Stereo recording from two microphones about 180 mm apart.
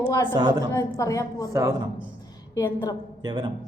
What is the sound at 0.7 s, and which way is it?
Speech, 20° left (ahead or behind).